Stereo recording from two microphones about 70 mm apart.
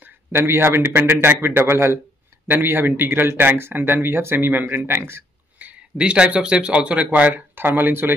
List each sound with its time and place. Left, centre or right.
0.3 s speech: right
5.6 s speech: centre